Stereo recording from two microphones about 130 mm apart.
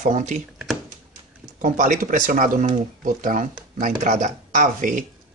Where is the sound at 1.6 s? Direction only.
85° right.